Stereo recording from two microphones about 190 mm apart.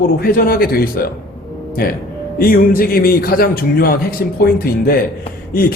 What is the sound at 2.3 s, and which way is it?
A man's voice, 50° left (ahead or behind).